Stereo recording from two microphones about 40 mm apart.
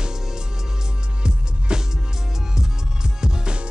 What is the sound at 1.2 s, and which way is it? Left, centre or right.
Music, right.